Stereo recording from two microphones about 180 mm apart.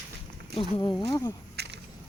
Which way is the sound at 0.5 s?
30° left (ahead or behind).